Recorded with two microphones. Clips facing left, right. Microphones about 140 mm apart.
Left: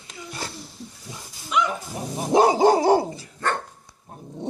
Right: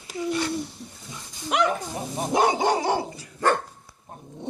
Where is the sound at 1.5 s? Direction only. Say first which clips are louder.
Right 1 dB; 60° right (ahead or behind).